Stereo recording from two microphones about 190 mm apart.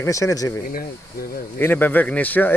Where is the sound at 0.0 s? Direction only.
15° left (ahead or behind).